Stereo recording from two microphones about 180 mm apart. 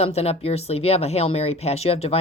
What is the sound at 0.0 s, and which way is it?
Speech, 35° left (ahead or behind).